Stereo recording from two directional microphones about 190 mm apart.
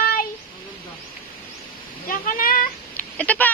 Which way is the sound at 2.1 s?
50° left (ahead or behind).